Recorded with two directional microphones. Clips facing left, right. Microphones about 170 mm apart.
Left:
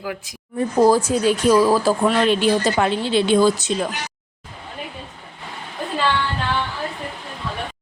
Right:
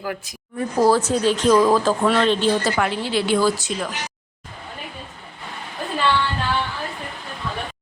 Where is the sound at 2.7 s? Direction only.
25° left (ahead or behind).